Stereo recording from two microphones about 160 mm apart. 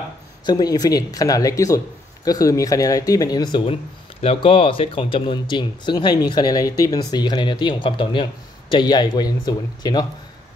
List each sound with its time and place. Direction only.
0.5 s speech: 25° left (ahead or behind)
4.2 s speech: 35° left (ahead or behind)